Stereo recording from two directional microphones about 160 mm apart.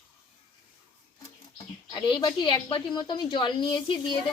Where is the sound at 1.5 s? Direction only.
30° left (ahead or behind).